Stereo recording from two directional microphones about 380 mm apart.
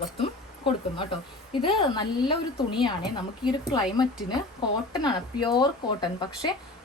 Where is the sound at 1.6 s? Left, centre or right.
Centre.